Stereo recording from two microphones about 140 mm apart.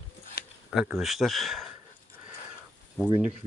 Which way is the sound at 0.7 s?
Centre (ahead or behind).